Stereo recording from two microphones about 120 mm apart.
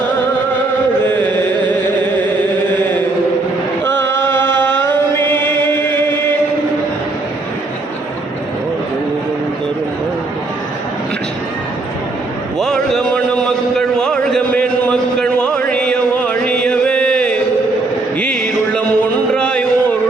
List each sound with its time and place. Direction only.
1.0 s mantra: 15° left (ahead or behind)
4.2 s chant: 20° left (ahead or behind)
12.5 s a sound: 5° left (ahead or behind)
18.2 s music: 10° left (ahead or behind)